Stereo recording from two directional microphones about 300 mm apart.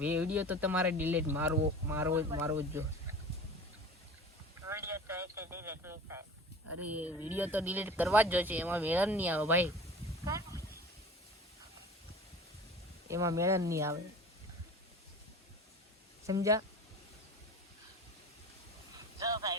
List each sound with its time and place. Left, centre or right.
0.0 s speech: centre
4.7 s a sound: centre
6.7 s speech: right
6.9 s speech: centre
10.2 s a sound: centre
13.1 s speech: centre
16.2 s speech: centre
19.2 s speech: centre